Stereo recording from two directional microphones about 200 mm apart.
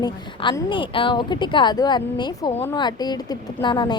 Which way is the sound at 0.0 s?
20° left (ahead or behind).